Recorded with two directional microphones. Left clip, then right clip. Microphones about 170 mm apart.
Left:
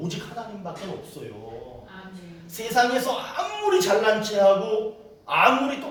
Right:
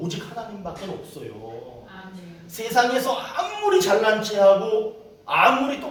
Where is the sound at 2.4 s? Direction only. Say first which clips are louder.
Right 1 dB; centre (ahead or behind).